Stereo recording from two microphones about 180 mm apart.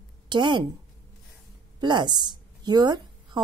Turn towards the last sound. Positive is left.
turn(degrees=-25)  # may be behind; listen again after turning